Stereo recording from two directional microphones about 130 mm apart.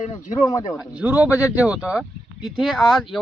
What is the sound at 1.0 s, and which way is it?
A man's voice, 10° right (ahead or behind).